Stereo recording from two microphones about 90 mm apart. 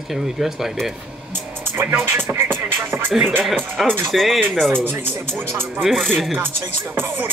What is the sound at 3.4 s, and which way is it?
Speech, centre (ahead or behind).